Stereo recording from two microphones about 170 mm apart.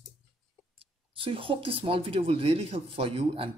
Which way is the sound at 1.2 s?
30° right (ahead or behind).